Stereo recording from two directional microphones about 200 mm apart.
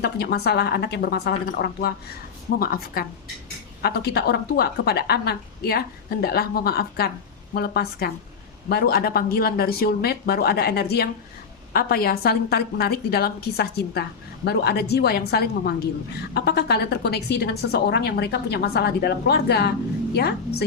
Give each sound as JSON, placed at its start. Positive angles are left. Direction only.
{"t": 0.0, "sound": "a woman's voice", "side_deg": 55}